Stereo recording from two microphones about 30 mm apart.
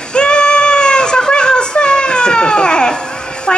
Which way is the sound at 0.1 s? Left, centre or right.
Left.